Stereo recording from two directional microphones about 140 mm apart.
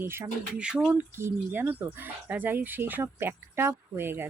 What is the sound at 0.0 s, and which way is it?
Speech, 15° right (ahead or behind).